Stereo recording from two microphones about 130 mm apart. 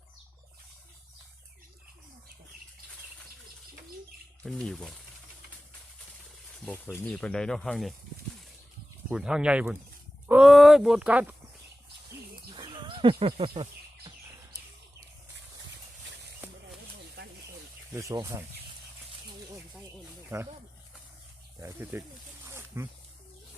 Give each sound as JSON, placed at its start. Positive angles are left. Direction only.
{"t": 4.4, "sound": "speech", "side_deg": 5}
{"t": 6.7, "sound": "speech", "side_deg": 15}
{"t": 9.0, "sound": "speech", "side_deg": -5}
{"t": 12.5, "sound": "bird", "side_deg": -35}
{"t": 18.1, "sound": "speech", "side_deg": -25}
{"t": 20.3, "sound": "speech", "side_deg": -20}
{"t": 21.6, "sound": "speech", "side_deg": -20}
{"t": 22.4, "sound": "wild animals", "side_deg": -20}